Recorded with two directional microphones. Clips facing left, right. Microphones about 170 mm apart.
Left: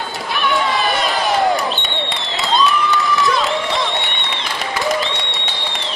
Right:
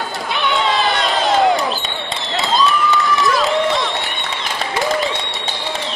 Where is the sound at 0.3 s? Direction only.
20° right (ahead or behind).